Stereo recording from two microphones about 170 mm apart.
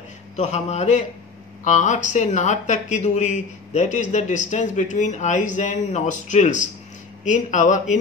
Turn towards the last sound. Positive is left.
turn(degrees=45)  # may be behind; listen again after turning